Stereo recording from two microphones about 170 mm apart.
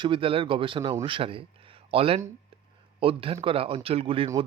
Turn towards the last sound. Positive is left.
turn(degrees=-35)  # may be behind; listen again after turning